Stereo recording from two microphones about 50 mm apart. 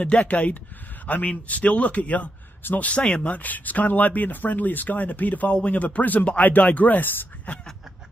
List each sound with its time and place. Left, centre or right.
0.0 s a man's voice: left
2.9 s speech: left